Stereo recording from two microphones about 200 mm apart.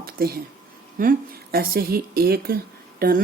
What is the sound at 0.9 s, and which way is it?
A woman's voice, 45° right (ahead or behind).